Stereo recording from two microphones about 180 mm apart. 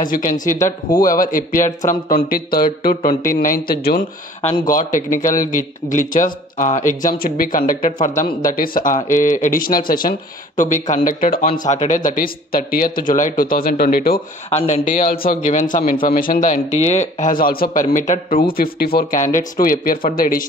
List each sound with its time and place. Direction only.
0.1 s a man's voice: 45° left (ahead or behind)
4.6 s a man's voice: 45° left (ahead or behind)
14.5 s a man's voice: 45° left (ahead or behind)